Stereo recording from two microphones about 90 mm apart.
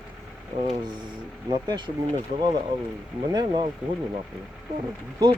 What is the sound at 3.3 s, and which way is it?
Speech, 55° right (ahead or behind).